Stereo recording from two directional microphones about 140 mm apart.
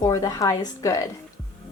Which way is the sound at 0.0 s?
30° left (ahead or behind).